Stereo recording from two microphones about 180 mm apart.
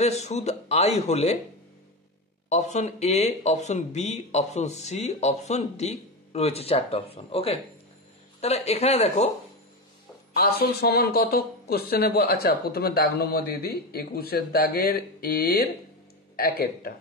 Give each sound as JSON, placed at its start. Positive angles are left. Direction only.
{"t": 0.0, "sound": "speech", "side_deg": 40}
{"t": 2.5, "sound": "speech", "side_deg": 40}
{"t": 10.3, "sound": "speech", "side_deg": 60}